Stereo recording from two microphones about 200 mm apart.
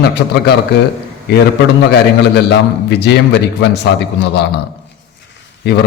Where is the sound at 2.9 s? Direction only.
60° left (ahead or behind).